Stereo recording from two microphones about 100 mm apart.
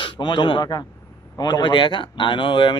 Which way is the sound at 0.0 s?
55° left (ahead or behind).